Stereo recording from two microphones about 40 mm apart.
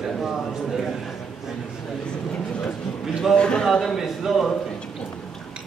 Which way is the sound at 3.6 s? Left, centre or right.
Centre.